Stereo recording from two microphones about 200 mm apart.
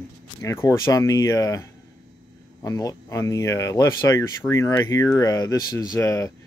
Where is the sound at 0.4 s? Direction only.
15° left (ahead or behind).